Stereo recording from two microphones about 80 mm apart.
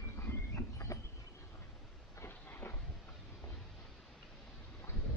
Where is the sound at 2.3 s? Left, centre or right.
Left.